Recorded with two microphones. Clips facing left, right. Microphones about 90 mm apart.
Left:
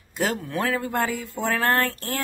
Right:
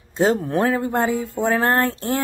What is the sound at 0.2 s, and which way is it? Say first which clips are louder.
Speech: right 7 dB; 30° right (ahead or behind).